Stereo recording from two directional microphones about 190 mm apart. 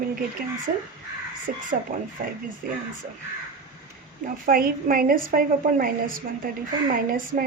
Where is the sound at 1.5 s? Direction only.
50° right (ahead or behind).